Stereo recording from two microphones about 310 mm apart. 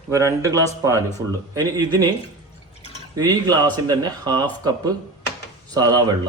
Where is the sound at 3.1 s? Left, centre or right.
Centre.